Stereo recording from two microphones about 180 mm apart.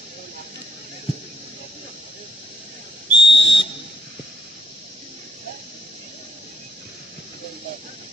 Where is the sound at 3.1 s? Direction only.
75° left (ahead or behind).